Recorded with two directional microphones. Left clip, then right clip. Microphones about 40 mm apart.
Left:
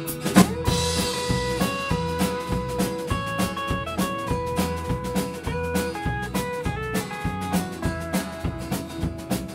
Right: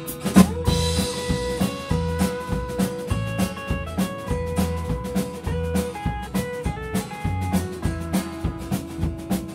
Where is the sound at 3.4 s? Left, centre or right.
Left.